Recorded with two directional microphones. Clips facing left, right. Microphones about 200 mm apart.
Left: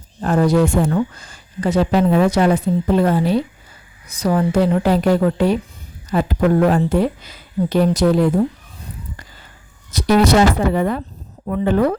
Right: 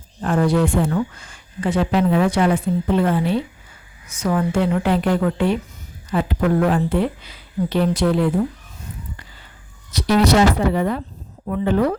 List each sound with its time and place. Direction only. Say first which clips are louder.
0.2 s speech: left 3 dB; 40° left (ahead or behind)
9.9 s speech: left 2 dB; 45° left (ahead or behind)